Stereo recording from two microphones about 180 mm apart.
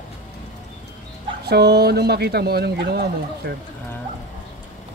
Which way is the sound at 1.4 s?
65° right (ahead or behind).